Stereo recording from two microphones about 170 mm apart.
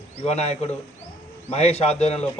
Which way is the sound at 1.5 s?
40° left (ahead or behind).